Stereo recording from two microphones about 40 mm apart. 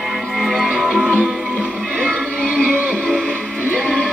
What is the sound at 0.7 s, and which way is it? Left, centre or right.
Music, right.